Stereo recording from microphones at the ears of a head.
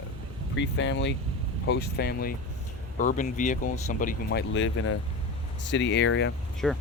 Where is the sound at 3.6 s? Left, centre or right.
Left.